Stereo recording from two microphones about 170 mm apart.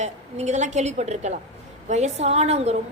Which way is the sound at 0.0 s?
45° right (ahead or behind).